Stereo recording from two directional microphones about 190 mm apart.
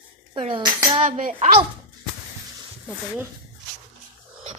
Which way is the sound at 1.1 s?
45° right (ahead or behind).